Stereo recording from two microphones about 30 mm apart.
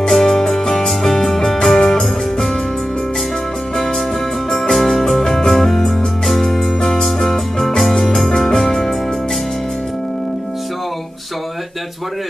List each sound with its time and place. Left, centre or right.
0.1 s music: centre
4.5 s music: centre